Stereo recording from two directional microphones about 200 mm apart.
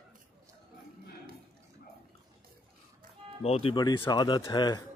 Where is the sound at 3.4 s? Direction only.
30° left (ahead or behind).